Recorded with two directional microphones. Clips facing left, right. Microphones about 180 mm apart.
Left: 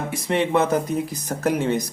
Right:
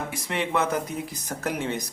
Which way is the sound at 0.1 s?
30° left (ahead or behind).